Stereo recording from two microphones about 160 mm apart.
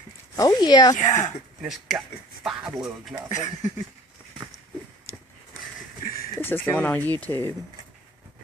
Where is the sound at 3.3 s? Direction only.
50° left (ahead or behind).